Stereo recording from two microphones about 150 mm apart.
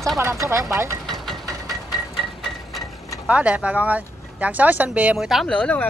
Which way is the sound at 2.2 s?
Centre (ahead or behind).